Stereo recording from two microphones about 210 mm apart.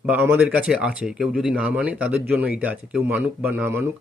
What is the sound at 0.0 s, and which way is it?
Speech, 10° right (ahead or behind).